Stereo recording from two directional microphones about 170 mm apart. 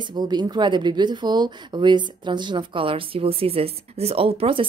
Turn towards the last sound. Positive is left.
turn(degrees=-35)  # may be behind; listen again after turning